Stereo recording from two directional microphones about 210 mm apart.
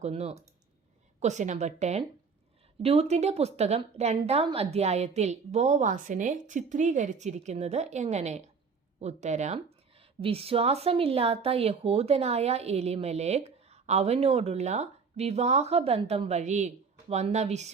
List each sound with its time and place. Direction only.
0.0 s a woman's voice: 30° right (ahead or behind)